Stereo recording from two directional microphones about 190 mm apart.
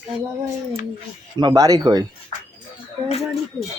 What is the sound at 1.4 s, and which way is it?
Speech, 20° right (ahead or behind).